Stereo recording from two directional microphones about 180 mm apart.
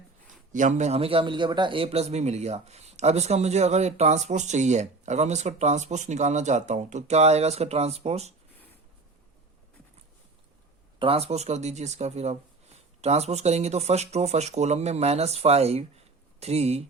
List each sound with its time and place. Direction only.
0.5 s a man's voice: 40° right (ahead or behind)
11.0 s a man's voice: 35° right (ahead or behind)